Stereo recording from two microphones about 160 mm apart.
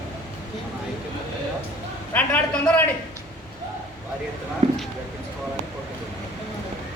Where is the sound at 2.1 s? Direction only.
10° left (ahead or behind).